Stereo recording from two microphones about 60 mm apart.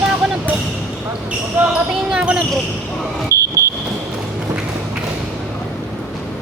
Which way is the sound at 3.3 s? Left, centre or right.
Right.